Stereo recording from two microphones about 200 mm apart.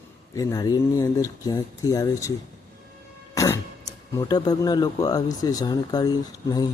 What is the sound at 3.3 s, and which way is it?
Cough, 15° left (ahead or behind).